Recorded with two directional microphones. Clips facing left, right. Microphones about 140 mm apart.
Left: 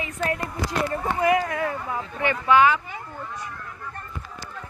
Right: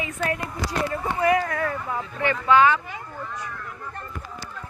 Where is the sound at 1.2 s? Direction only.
20° left (ahead or behind).